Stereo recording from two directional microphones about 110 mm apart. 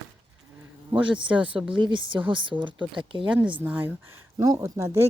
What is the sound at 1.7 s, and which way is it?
Speech, 45° right (ahead or behind).